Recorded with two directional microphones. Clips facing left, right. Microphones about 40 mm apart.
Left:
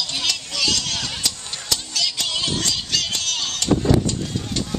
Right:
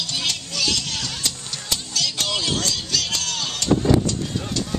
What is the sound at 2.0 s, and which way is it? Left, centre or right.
Music, right.